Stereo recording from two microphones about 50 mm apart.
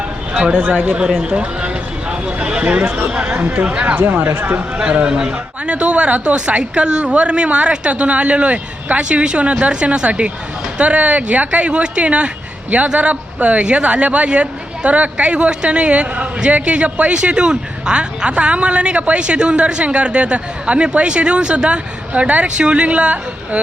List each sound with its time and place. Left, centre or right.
0.3 s speech: centre
0.6 s speech: right
4.8 s speech: right